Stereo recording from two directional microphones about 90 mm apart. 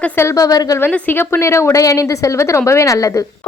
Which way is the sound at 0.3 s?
40° left (ahead or behind).